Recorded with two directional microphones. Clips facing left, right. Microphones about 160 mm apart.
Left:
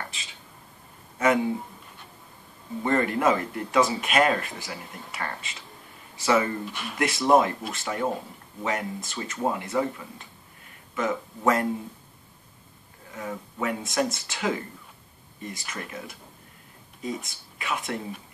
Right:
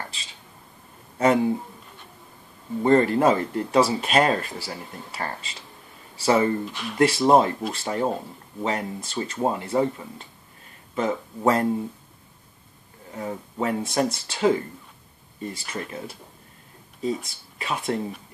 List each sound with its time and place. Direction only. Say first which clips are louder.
1.1 s a sound: right 3 dB; 30° right (ahead or behind)
2.8 s speech: right 5 dB; 30° right (ahead or behind)
6.6 s speech: right 3 dB; centre (ahead or behind)
7.0 s speech: right 3 dB; 30° right (ahead or behind)
13.1 s speech: right 3 dB; 30° right (ahead or behind)